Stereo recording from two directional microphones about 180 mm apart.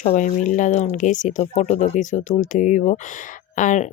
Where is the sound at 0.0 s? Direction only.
40° left (ahead or behind).